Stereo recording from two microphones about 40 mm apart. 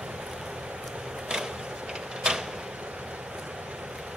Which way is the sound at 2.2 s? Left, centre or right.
Right.